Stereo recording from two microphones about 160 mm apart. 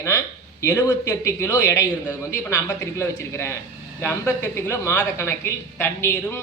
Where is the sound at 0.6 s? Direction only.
20° left (ahead or behind).